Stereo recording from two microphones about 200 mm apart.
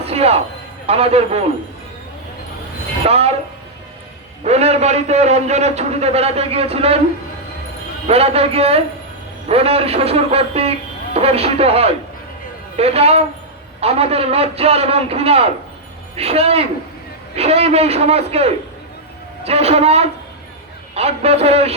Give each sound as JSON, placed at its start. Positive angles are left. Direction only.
{"t": 0.0, "sound": "a sound", "side_deg": -30}
{"t": 0.9, "sound": "a man's voice", "side_deg": -30}
{"t": 3.1, "sound": "a man's voice", "side_deg": -30}
{"t": 4.4, "sound": "a man's voice", "side_deg": -35}
{"t": 8.0, "sound": "a man's voice", "side_deg": -30}